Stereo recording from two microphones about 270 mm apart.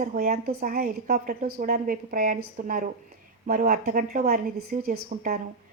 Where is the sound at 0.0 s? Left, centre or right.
Right.